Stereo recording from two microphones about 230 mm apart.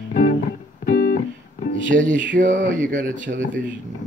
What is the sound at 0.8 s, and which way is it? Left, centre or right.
Music, left.